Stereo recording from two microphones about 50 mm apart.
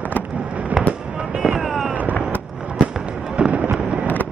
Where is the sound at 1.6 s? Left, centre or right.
Centre.